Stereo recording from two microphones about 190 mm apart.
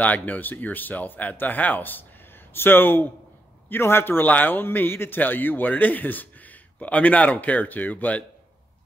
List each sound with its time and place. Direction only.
0.0 s a man's voice: 10° left (ahead or behind)